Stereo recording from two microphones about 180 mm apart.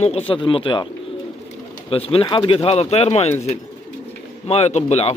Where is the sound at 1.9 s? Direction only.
30° left (ahead or behind).